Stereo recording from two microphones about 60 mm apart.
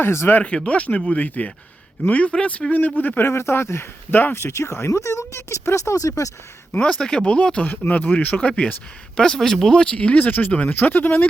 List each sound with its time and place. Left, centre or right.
0.0 s speech: left
0.4 s speech: centre; by 6.3 s left
7.0 s speech: centre
9.8 s speech: centre